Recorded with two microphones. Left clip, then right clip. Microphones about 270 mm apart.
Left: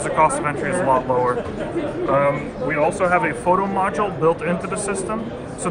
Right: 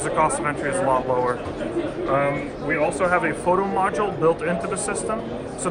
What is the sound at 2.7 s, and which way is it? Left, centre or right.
Speech, centre.